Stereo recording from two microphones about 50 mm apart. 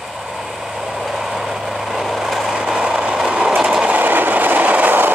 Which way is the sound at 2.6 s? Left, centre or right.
Centre.